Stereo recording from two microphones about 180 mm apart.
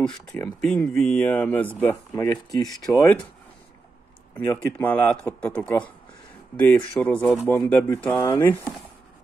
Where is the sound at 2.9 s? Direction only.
10° left (ahead or behind).